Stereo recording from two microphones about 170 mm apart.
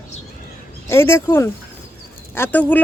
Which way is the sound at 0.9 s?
15° left (ahead or behind).